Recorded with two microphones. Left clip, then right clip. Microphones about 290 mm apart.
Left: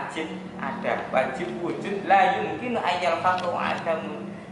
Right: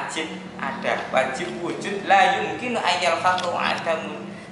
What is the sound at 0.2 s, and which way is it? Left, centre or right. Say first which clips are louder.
A man's voice: right 3 dB; centre.